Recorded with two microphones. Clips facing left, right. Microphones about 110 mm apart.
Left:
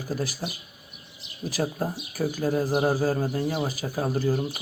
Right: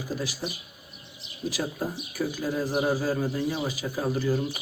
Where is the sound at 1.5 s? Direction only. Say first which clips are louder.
Left 2 dB; 45° left (ahead or behind).